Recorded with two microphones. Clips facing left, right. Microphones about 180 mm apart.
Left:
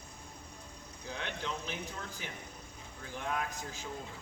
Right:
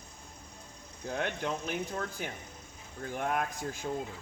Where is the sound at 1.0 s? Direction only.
55° right (ahead or behind).